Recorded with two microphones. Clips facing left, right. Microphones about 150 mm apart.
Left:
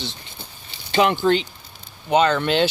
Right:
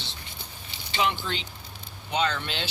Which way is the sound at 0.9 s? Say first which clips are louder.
Left 11 dB; 55° left (ahead or behind).